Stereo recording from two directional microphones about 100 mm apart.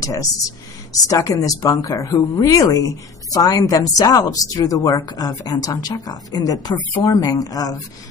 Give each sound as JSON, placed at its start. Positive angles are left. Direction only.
{"t": 0.0, "sound": "a woman's voice", "side_deg": 35}